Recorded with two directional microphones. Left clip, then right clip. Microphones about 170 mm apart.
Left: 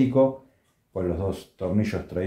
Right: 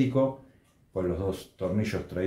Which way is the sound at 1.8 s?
30° left (ahead or behind).